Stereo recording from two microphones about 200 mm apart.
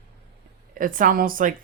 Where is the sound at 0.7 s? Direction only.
40° right (ahead or behind).